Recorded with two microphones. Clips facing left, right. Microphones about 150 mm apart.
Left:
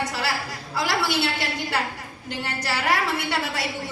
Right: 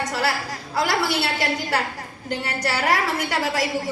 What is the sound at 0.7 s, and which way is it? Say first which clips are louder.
Speech: right 2 dB; 40° right (ahead or behind).